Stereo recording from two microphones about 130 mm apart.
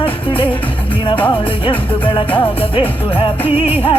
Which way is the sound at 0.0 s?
45° left (ahead or behind).